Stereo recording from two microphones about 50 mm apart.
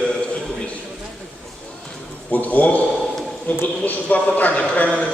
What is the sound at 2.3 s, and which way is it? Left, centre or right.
A man's voice, left.